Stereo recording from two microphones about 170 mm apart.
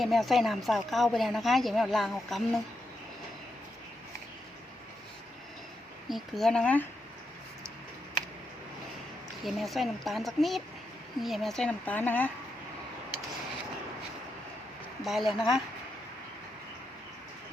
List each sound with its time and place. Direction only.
0.0 s a woman's voice: centre (ahead or behind)
6.1 s a woman's voice: centre (ahead or behind)
9.4 s a woman's voice: centre (ahead or behind)
15.0 s a woman's voice: centre (ahead or behind)